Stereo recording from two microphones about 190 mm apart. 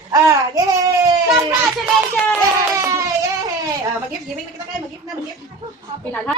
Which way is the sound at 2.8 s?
20° right (ahead or behind).